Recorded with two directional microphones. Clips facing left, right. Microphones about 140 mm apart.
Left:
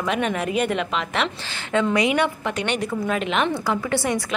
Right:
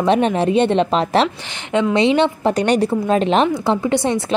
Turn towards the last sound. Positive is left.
turn(degrees=-25)  # may be behind; listen again after turning